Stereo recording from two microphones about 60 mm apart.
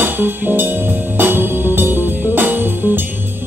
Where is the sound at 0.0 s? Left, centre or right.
Right.